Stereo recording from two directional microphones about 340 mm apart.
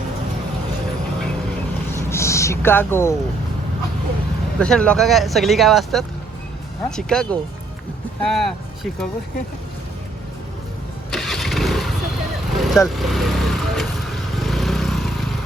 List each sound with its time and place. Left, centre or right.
2.0 s a sound: centre
4.6 s speech: centre
11.1 s vehicle: centre